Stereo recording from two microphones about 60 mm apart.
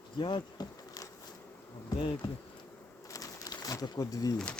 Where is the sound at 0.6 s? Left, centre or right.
Left.